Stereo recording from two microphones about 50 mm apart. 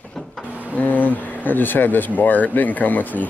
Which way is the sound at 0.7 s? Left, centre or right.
Left.